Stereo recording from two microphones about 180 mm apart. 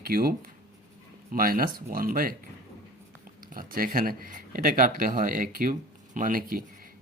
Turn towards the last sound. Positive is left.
turn(degrees=-50)  # may be behind; listen again after turning